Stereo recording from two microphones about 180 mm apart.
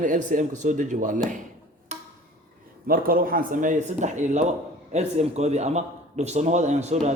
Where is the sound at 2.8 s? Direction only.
55° right (ahead or behind).